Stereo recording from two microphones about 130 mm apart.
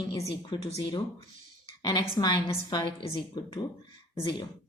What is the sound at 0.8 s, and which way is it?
A woman's voice, 40° left (ahead or behind).